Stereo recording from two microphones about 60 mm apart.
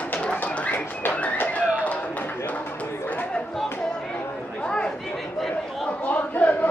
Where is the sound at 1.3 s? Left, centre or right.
Left.